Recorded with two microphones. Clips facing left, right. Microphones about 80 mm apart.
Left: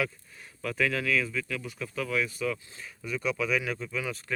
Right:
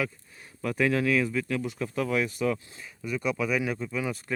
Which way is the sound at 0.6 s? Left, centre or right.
Right.